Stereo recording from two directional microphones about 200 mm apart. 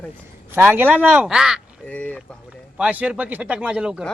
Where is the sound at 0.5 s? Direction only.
10° right (ahead or behind).